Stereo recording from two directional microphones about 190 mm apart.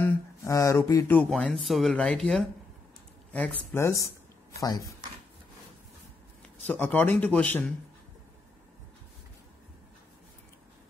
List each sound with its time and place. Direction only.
0.0 s speech: 15° left (ahead or behind)
6.6 s speech: 10° left (ahead or behind)